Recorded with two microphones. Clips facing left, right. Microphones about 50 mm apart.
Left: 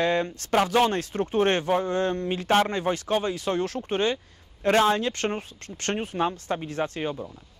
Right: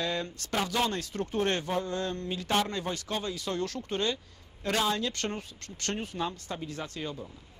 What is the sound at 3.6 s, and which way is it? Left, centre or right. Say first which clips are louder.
Speech: left 6 dB; left.